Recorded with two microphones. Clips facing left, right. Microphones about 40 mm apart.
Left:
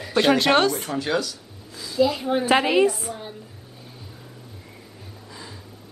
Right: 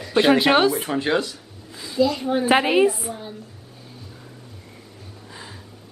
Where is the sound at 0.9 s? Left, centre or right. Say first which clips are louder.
Right 3 dB; right.